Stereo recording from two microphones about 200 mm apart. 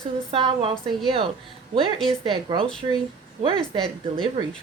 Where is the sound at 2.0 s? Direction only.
25° right (ahead or behind).